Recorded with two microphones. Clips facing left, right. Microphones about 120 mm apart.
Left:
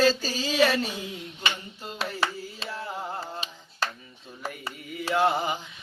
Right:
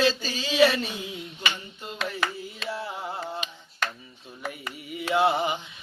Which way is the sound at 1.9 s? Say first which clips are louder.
Even; 30° left (ahead or behind).